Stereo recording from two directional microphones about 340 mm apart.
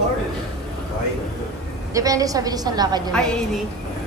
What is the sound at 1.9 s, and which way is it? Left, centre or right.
A woman's voice, centre.